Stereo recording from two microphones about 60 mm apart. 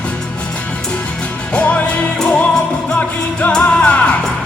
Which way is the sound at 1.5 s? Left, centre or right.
Left.